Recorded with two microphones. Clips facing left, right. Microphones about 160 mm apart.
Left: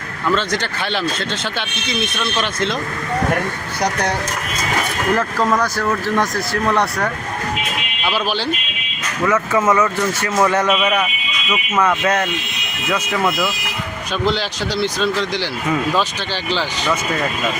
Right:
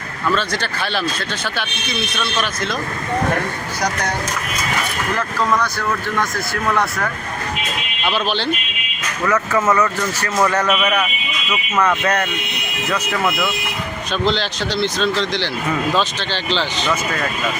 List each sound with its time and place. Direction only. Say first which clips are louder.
0.3 s speech: left 1 dB; 20° left (ahead or behind)
5.6 s speech: left 3 dB; 40° left (ahead or behind)
8.0 s speech: even; 10° left (ahead or behind)